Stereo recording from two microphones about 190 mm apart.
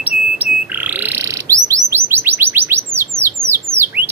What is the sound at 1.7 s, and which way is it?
Chirp, 15° right (ahead or behind).